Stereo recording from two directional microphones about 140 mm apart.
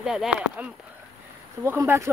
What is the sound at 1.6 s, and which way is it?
Speech, 20° right (ahead or behind).